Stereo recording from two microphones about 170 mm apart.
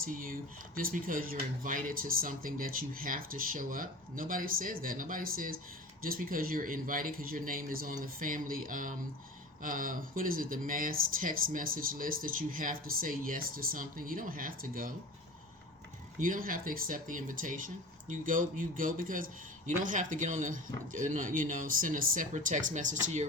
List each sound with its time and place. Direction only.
0.0 s speech: 55° right (ahead or behind)
16.2 s speech: 55° right (ahead or behind)